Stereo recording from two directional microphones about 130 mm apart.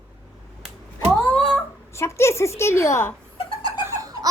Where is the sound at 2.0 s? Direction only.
20° left (ahead or behind).